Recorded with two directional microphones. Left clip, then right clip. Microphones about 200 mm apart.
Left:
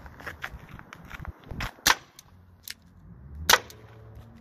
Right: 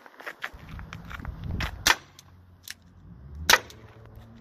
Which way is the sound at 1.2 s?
10° right (ahead or behind).